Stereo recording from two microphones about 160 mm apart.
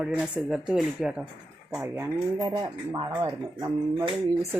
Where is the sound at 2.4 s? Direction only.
30° right (ahead or behind).